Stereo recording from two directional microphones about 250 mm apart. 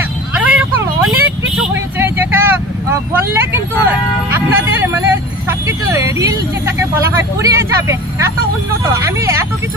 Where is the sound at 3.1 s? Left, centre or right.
Centre.